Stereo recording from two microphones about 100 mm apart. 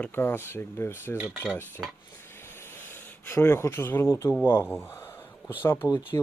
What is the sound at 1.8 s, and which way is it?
Speech, 10° right (ahead or behind).